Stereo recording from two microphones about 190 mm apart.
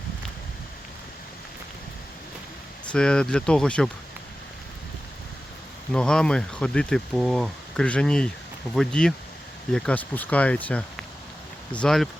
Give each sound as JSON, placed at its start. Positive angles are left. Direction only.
{"t": 2.9, "sound": "speech", "side_deg": 5}
{"t": 5.9, "sound": "speech", "side_deg": 5}